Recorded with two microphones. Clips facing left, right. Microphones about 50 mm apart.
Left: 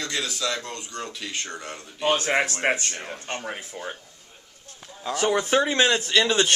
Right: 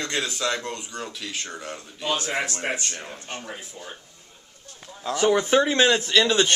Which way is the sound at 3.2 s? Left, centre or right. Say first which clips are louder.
Left 3 dB; left.